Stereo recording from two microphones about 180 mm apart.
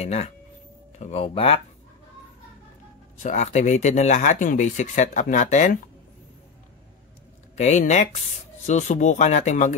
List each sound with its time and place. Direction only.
0.0 s speech: 35° left (ahead or behind)
3.2 s speech: 40° left (ahead or behind)
7.5 s speech: 40° left (ahead or behind)